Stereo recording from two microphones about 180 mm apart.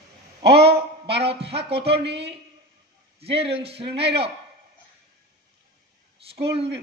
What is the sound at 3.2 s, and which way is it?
A man's voice, 35° right (ahead or behind).